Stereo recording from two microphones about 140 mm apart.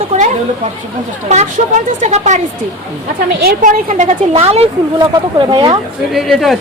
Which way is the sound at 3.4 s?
80° right.